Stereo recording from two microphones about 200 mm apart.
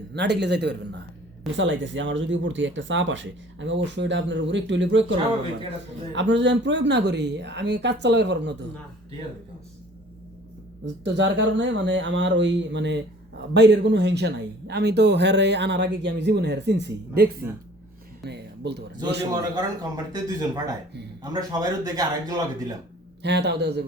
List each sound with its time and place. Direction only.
0.1 s speech: 60° right (ahead or behind)
6.1 s speech: 60° right (ahead or behind)
11.0 s speech: 65° right (ahead or behind)
17.4 s speech: 10° right (ahead or behind)
18.2 s music: 55° right (ahead or behind)
19.3 s speech: 20° right (ahead or behind)
23.2 s speech: 55° right (ahead or behind)